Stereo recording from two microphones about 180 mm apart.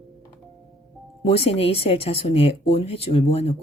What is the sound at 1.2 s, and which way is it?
Speech, 35° left (ahead or behind).